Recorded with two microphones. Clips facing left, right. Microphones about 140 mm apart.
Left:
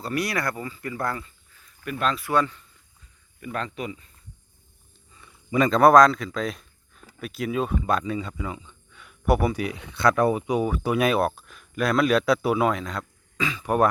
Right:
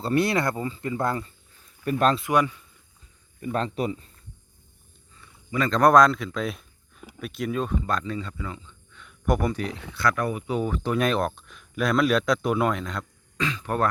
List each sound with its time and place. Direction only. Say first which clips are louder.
0.0 s speech: right 4 dB; 25° right (ahead or behind)
1.8 s speech: right 5 dB; 40° right (ahead or behind)
2.1 s a man's voice: right 1 dB; 15° right (ahead or behind)
3.4 s speech: right 4 dB; 30° right (ahead or behind)
5.5 s a man's voice: left 4 dB; 20° left (ahead or behind)
5.7 s speech: left 2 dB; 5° left (ahead or behind); by 10.4 s 30° left (ahead or behind)
10.4 s speech: left 2 dB; 10° left (ahead or behind)